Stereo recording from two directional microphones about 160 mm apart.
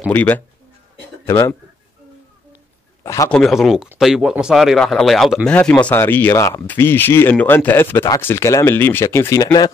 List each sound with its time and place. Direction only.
0.1 s speech: 10° left (ahead or behind)
3.0 s a sound: 20° left (ahead or behind)
3.3 s speech: 5° left (ahead or behind); by 9.7 s 25° left (ahead or behind)